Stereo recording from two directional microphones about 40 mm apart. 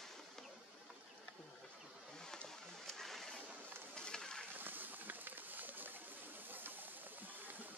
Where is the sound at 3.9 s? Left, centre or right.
Left.